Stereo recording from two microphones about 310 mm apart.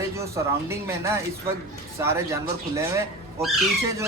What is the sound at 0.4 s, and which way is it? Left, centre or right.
Speech, centre.